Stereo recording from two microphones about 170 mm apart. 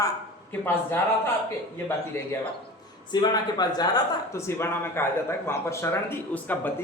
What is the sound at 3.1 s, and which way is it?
A man's voice, 25° left (ahead or behind).